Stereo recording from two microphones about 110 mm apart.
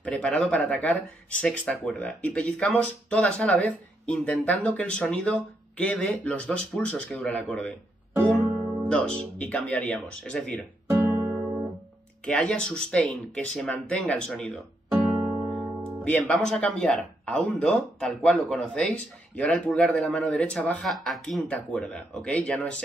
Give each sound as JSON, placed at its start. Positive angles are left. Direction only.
{"t": 0.0, "sound": "speech", "side_deg": 10}
{"t": 8.8, "sound": "speech", "side_deg": 10}
{"t": 10.9, "sound": "music", "side_deg": -20}
{"t": 12.3, "sound": "speech", "side_deg": 5}
{"t": 14.9, "sound": "music", "side_deg": -10}
{"t": 16.0, "sound": "speech", "side_deg": 10}